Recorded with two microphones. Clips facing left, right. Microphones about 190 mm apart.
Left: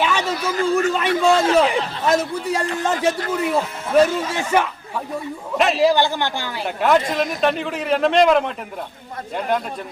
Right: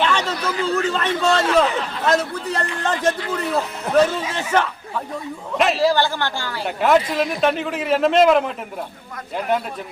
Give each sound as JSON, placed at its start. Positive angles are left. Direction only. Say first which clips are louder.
{"t": 0.0, "sound": "a sound", "louder": "even", "side_deg": 10}
{"t": 0.7, "sound": "a man's voice", "louder": "left 3 dB", "side_deg": 10}
{"t": 6.7, "sound": "a man's voice", "louder": "right 1 dB", "side_deg": 0}